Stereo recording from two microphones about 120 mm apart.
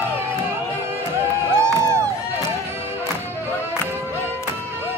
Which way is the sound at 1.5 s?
25° right (ahead or behind).